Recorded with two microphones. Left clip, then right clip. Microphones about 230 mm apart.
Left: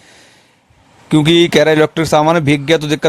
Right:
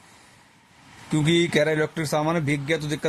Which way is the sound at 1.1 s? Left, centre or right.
Left.